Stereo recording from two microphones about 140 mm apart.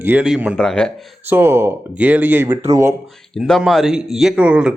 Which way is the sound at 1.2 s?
15° right (ahead or behind).